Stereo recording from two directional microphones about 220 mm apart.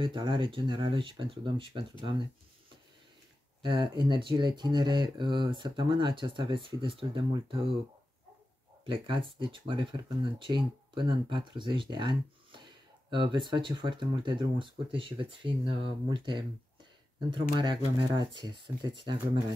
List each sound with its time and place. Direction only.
0.0 s speech: 20° right (ahead or behind)
3.6 s speech: 20° right (ahead or behind)
8.8 s speech: 20° right (ahead or behind)